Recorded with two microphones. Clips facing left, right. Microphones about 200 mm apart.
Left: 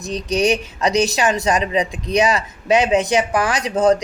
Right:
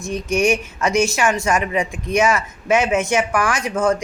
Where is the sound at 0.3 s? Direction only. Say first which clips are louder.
Even; 35° left (ahead or behind).